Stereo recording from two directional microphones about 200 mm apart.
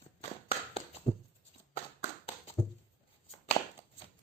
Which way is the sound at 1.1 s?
25° left (ahead or behind).